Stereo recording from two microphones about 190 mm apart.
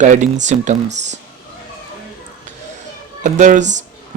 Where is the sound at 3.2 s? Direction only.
40° right (ahead or behind).